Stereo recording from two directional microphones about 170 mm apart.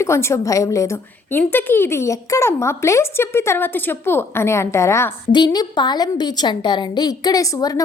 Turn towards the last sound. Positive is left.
turn(degrees=20)  # may be behind; listen again after turning